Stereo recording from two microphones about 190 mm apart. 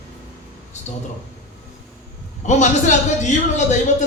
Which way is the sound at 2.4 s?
40° left (ahead or behind).